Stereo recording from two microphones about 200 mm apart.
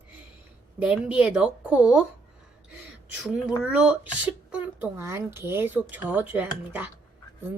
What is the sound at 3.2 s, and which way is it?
A woman's voice, 5° right (ahead or behind).